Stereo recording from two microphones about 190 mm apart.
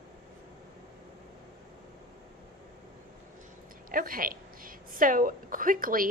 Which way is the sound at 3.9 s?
45° right (ahead or behind).